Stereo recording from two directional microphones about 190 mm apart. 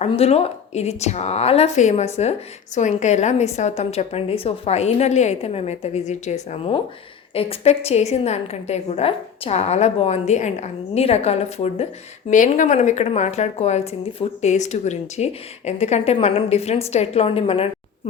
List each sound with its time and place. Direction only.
0.0 s speech: 35° left (ahead or behind)